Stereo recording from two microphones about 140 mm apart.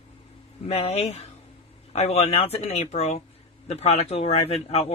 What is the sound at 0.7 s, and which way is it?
A man's voice, 45° left (ahead or behind).